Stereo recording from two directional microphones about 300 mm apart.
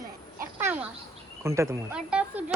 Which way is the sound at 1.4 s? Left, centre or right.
Centre.